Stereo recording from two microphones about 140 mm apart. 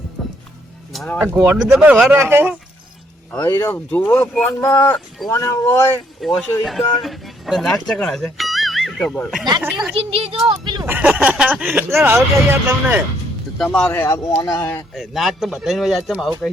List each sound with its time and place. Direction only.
0.2 s music: centre (ahead or behind)
1.2 s speech: 15° right (ahead or behind)
3.4 s speech: 25° left (ahead or behind)
6.2 s speech: centre (ahead or behind)
9.0 s speech: 10° left (ahead or behind)
9.9 s speech: 45° right (ahead or behind)
10.5 s a sound: 35° right (ahead or behind)
10.8 s speech: 15° right (ahead or behind)
13.6 s speech: 10° left (ahead or behind)
14.9 s speech: centre (ahead or behind)